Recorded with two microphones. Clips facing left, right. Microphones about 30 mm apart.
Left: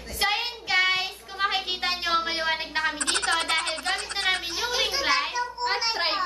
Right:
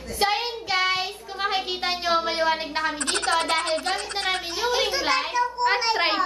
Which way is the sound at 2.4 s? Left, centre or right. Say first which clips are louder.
Right 2 dB; centre.